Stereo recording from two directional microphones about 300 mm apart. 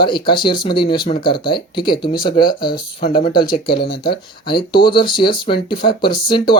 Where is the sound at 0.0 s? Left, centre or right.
Centre.